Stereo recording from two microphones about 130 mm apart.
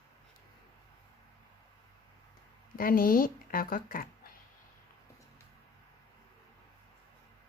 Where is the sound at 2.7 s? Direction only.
90° left.